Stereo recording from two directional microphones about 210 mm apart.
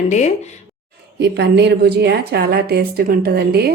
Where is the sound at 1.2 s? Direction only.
55° right (ahead or behind).